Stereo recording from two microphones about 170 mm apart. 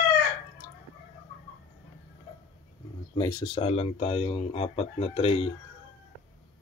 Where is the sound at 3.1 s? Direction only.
20° left (ahead or behind).